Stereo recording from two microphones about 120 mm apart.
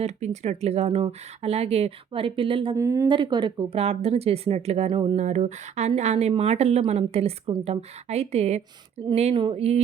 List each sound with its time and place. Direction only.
0.0 s speech: 65° right (ahead or behind); by 2.7 s 45° right (ahead or behind)
2.7 s speech: 25° right (ahead or behind)
3.1 s speech: 40° right (ahead or behind)
3.8 s speech: 55° right (ahead or behind)
4.9 s a sound: 45° right (ahead or behind)
5.1 s speech: 65° right (ahead or behind)
9.3 s a sound: 45° right (ahead or behind)